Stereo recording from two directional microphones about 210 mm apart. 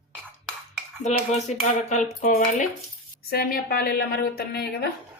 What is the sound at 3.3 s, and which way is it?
A woman's voice, 45° left (ahead or behind).